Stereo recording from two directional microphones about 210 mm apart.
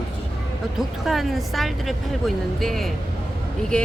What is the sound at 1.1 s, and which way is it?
Speech, centre (ahead or behind).